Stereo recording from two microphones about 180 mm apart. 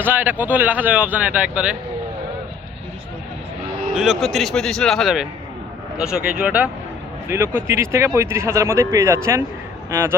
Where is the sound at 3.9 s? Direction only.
Centre (ahead or behind).